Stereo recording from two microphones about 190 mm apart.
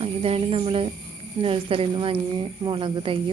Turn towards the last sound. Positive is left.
turn(degrees=-25)  # may be behind; listen again after turning